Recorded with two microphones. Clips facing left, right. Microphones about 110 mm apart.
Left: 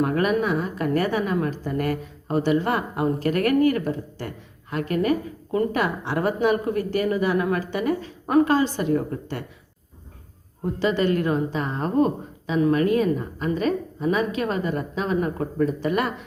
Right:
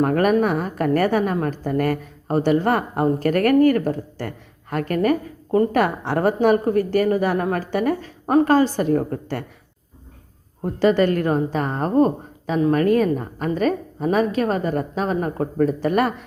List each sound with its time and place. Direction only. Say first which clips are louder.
0.0 s a woman's voice: right 4 dB; 45° right (ahead or behind)
10.8 s a woman's voice: right 5 dB; 45° right (ahead or behind)